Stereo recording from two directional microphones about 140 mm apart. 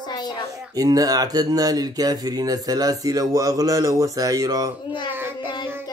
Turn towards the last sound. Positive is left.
turn(degrees=-15)  # may be behind; listen again after turning